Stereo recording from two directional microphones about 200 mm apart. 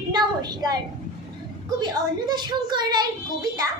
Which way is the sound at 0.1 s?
20° right (ahead or behind).